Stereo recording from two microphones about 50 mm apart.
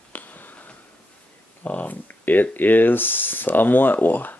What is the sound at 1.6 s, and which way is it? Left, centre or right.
Speech, left.